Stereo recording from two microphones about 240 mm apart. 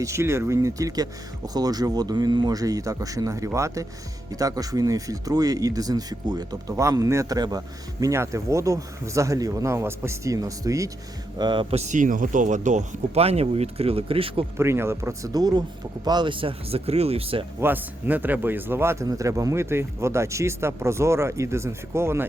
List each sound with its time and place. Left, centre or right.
0.0 s speech: centre
14.6 s speech: centre
17.6 s speech: centre